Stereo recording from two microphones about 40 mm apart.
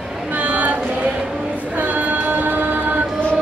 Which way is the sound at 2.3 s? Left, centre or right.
Right.